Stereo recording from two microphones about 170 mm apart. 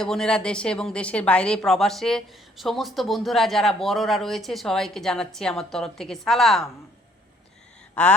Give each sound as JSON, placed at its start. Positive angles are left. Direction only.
{"t": 0.0, "sound": "speech", "side_deg": 5}